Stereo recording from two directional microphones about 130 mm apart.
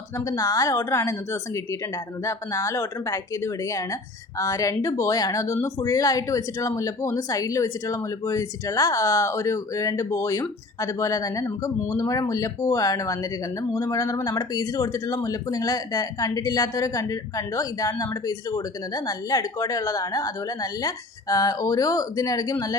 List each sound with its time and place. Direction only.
0.3 s speech: 25° left (ahead or behind)